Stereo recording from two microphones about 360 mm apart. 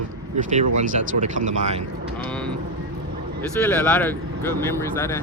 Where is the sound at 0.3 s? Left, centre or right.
Right.